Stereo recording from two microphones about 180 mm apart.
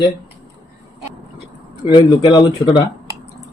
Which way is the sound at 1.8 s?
25° left (ahead or behind).